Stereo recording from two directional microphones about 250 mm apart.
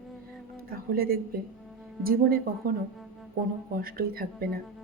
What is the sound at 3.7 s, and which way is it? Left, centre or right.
Speech, right.